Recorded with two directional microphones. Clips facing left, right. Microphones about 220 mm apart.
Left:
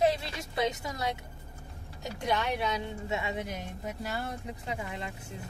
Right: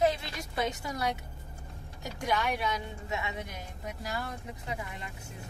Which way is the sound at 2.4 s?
25° left (ahead or behind).